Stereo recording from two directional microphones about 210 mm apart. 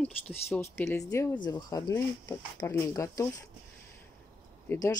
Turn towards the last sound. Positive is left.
turn(degrees=15)  # may be behind; listen again after turning